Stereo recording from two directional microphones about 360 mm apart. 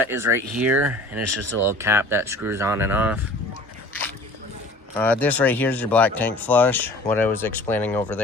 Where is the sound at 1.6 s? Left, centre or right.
Centre.